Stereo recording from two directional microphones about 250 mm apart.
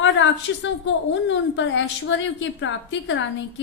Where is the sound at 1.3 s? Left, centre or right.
Left.